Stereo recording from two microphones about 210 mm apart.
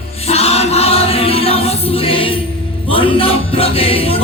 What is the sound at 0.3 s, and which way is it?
Choir, 30° left (ahead or behind).